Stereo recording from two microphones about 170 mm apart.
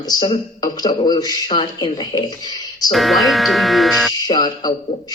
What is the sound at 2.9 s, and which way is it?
Speech, centre (ahead or behind).